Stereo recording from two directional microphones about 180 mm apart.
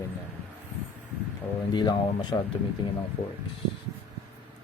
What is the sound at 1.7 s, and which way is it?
Speech, 25° left (ahead or behind).